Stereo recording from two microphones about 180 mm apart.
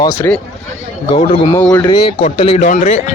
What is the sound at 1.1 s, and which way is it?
Speech, 40° left (ahead or behind).